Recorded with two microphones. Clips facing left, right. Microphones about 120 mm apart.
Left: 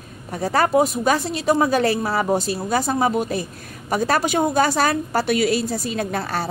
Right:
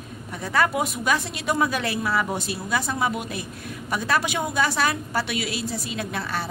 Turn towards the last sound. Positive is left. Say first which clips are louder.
# left 5 dB
turn(degrees=40)  # may be behind; listen again after turning